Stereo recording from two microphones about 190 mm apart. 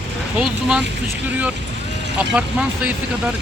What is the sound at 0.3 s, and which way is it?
Speech, 5° right (ahead or behind).